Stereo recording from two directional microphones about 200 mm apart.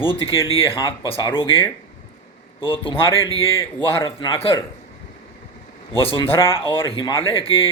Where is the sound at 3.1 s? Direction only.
20° right (ahead or behind).